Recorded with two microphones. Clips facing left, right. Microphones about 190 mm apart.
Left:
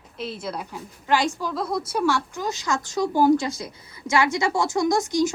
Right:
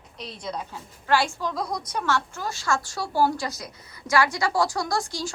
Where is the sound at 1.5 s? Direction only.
5° left (ahead or behind); by 5.3 s 20° left (ahead or behind).